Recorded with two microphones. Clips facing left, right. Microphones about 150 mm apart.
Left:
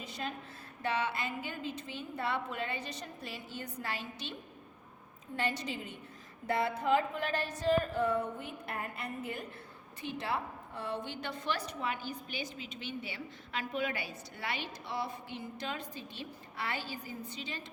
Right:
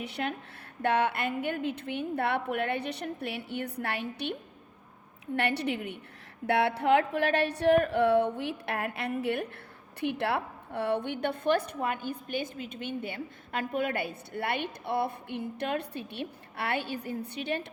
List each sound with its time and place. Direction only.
0.0 s a woman's voice: 65° right (ahead or behind)
5.4 s a woman's voice: 65° right (ahead or behind)